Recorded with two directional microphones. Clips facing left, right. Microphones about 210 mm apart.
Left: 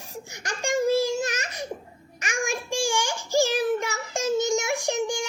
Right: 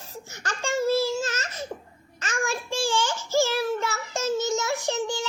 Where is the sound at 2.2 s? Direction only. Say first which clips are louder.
Even; 15° left (ahead or behind).